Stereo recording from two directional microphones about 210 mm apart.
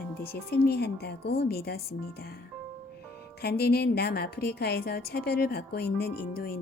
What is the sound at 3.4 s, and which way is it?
A woman's voice, 50° left (ahead or behind).